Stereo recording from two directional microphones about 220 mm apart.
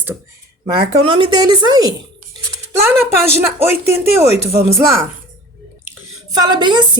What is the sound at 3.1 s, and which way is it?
A woman's voice, 10° right (ahead or behind).